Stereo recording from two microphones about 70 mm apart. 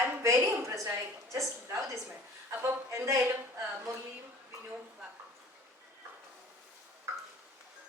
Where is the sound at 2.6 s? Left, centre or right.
Right.